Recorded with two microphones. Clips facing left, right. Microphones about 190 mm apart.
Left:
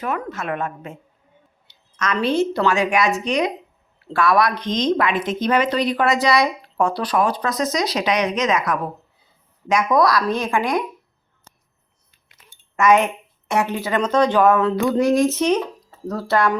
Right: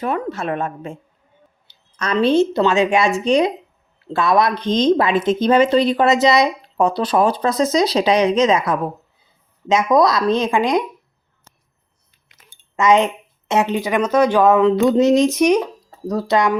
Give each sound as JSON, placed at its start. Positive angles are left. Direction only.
{"t": 0.0, "sound": "a woman's voice", "side_deg": -30}
{"t": 12.7, "sound": "speech", "side_deg": -20}